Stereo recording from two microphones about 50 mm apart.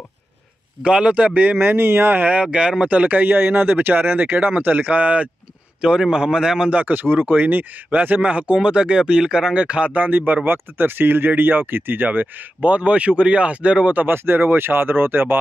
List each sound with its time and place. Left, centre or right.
0.8 s speech: right
1.6 s speech: right
2.3 s speech: centre
5.8 s a man's voice: centre
6.7 s speech: right
8.5 s speech: centre
14.0 s speech: right